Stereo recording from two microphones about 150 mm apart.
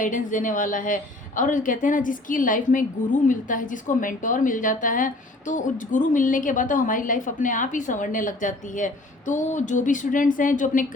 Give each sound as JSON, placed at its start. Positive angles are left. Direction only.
{"t": 0.0, "sound": "a woman's voice", "side_deg": 60}